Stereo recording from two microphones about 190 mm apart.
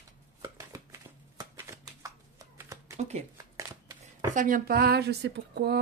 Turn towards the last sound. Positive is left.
turn(degrees=-60)  # may be behind; listen again after turning